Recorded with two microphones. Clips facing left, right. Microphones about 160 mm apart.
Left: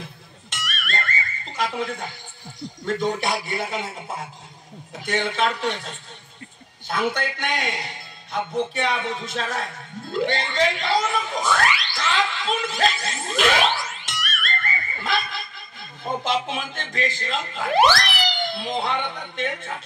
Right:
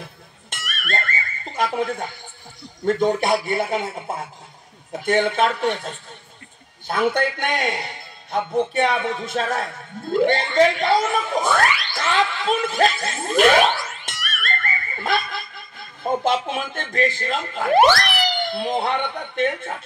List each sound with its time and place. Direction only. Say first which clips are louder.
0.5 s music: right 2 dB; 50° right (ahead or behind)
2.8 s speech: right 5 dB; 50° right (ahead or behind)
15.1 s snicker: right 3 dB; 50° right (ahead or behind)
16.0 s speech: right 4 dB; 50° right (ahead or behind)